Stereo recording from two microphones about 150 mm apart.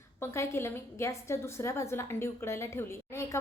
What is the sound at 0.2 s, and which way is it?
A woman's voice, 15° left (ahead or behind).